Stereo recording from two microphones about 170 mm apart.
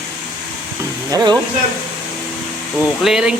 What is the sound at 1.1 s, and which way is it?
Speech, 25° right (ahead or behind).